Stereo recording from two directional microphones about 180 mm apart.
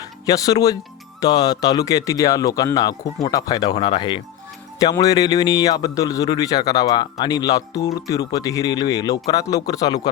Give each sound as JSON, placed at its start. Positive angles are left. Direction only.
{"t": 0.0, "sound": "speech", "side_deg": 20}